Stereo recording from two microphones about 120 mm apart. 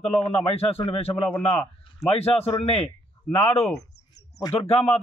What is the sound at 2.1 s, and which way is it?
A man's voice, 55° left (ahead or behind).